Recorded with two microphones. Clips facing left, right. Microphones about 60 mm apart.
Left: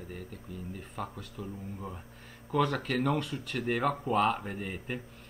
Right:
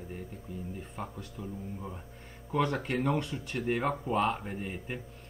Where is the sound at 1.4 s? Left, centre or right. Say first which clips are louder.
Left 1 dB; centre.